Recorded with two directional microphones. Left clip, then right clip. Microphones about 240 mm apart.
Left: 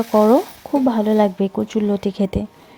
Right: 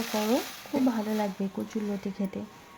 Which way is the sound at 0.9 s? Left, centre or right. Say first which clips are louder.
Left 13 dB; left.